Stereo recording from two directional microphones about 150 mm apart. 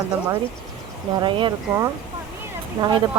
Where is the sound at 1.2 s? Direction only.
30° right (ahead or behind).